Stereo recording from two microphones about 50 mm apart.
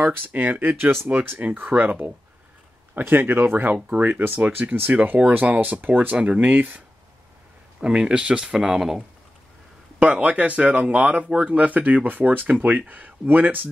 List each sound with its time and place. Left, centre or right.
0.3 s speech: right
7.8 s speech: centre
9.9 s speech: right